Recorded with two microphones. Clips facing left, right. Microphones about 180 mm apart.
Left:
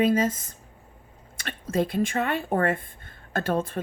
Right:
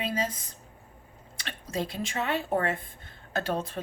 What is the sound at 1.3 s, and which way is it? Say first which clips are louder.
Speech: left 7 dB; 50° left (ahead or behind).